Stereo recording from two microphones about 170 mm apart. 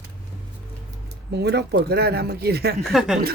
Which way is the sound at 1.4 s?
75° right (ahead or behind).